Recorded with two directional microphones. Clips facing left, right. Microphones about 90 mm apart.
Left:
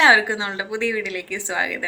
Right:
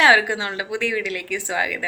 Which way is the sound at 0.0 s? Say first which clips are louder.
Even; 25° left (ahead or behind).